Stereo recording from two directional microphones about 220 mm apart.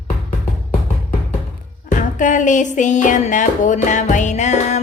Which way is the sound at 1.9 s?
35° left (ahead or behind).